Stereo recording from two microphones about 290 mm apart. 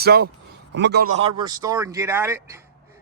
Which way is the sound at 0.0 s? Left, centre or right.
Right.